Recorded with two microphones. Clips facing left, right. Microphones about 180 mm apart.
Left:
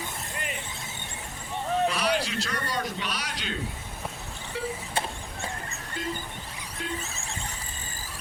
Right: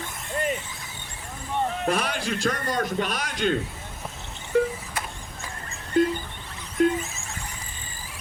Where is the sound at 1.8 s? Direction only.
50° right (ahead or behind).